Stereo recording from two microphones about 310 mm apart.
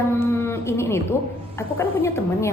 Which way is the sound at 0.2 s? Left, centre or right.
Centre.